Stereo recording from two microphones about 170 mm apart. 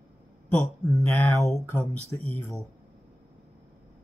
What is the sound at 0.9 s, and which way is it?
Speech, 15° left (ahead or behind).